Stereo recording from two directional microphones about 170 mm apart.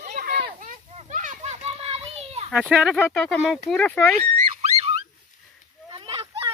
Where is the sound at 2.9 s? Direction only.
10° left (ahead or behind).